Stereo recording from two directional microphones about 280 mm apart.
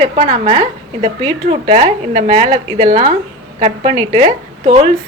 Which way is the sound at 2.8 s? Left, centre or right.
Right.